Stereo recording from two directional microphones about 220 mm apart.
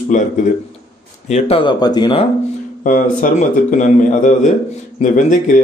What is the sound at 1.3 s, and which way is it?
Speech, 25° left (ahead or behind).